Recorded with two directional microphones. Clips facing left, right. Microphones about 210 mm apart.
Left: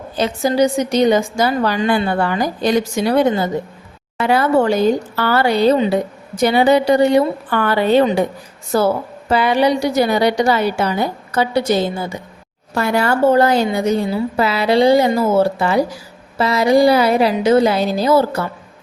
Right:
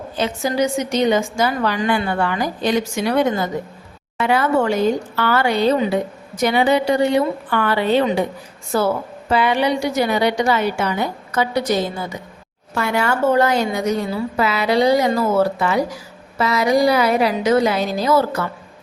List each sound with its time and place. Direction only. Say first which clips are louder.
0.2 s a woman's voice: left 4 dB; 35° left (ahead or behind)